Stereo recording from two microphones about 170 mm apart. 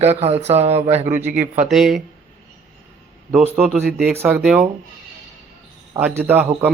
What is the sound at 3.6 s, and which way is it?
Speech, 5° right (ahead or behind).